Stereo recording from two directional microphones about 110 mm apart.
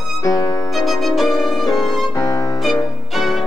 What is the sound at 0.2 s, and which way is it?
Music, 30° left (ahead or behind).